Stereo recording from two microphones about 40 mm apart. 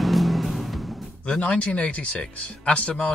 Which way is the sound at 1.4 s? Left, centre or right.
Left.